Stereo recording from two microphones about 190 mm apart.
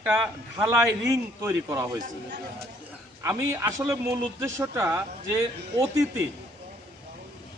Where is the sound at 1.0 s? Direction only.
15° right (ahead or behind).